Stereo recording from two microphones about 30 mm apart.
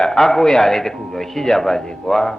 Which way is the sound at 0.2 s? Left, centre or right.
Centre.